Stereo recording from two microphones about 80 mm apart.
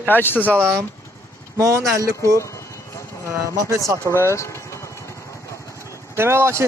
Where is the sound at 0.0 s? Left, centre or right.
Left.